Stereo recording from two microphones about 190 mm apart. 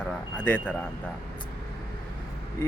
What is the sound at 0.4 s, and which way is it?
Speech, 5° left (ahead or behind).